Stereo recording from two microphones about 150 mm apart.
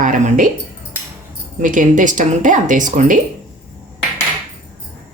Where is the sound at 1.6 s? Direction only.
60° right (ahead or behind).